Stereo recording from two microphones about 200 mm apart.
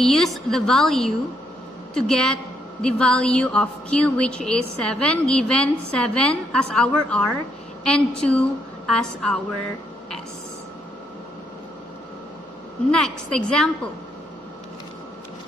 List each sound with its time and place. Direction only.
0.0 s a woman's voice: centre (ahead or behind)
12.9 s a woman's voice: 5° left (ahead or behind)